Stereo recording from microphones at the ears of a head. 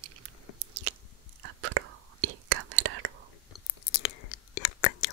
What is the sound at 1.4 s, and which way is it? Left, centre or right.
Whispering, right.